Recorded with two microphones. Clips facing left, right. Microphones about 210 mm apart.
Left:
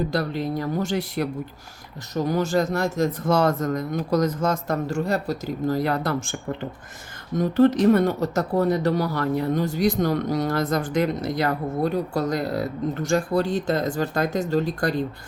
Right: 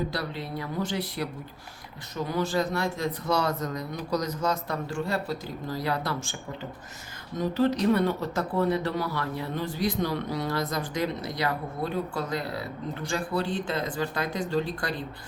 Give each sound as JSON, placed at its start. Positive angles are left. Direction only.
{"t": 0.1, "sound": "speech", "side_deg": 45}
{"t": 7.3, "sound": "speech", "side_deg": 50}